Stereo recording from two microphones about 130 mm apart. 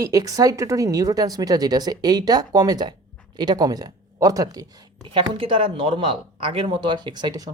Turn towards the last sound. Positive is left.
turn(degrees=-30)  # may be behind; listen again after turning